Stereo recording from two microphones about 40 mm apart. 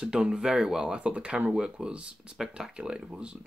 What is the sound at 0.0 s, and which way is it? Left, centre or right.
Speech, right.